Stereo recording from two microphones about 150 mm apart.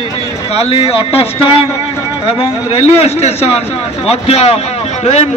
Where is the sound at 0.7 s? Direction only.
40° left (ahead or behind).